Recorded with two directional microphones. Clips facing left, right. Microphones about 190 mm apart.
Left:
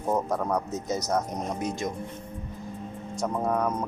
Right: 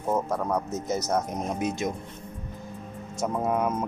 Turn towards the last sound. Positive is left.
turn(degrees=-5)  # may be behind; listen again after turning